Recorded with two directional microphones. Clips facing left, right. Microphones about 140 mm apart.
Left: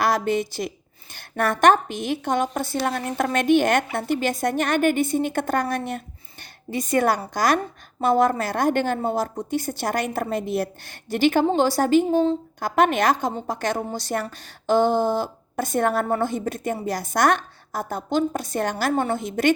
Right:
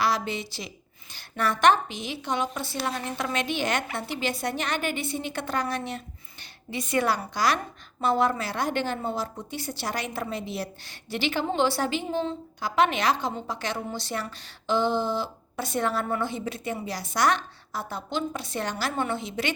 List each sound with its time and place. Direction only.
0.0 s a woman's voice: 50° left (ahead or behind)